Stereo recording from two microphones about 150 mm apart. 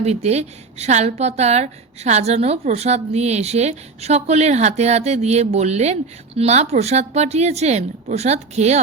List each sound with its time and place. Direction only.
0.0 s a woman's voice: 45° right (ahead or behind)